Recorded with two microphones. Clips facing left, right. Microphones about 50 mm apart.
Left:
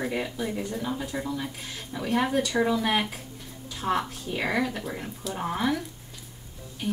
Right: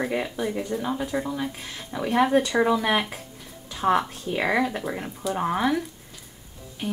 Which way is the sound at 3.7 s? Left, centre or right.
Right.